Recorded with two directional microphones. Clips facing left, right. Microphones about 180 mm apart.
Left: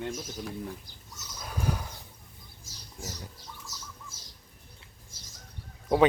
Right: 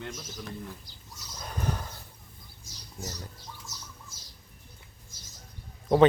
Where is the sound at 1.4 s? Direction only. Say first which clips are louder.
Left 1 dB; 5° left (ahead or behind).